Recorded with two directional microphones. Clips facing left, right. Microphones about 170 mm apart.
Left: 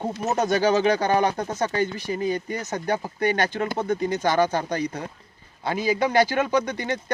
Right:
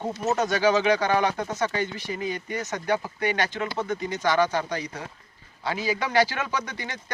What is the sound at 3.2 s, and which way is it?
Speech, 50° left (ahead or behind).